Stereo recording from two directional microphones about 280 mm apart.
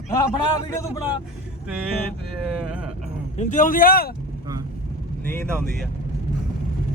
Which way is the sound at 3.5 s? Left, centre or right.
Left.